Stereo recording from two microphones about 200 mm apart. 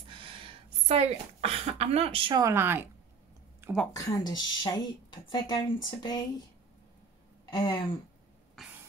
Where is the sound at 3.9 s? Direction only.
20° left (ahead or behind).